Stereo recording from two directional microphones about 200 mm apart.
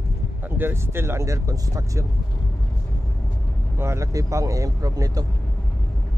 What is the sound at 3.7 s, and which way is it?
Speech, 15° right (ahead or behind).